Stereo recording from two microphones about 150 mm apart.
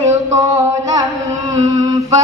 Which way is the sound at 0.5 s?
20° right (ahead or behind).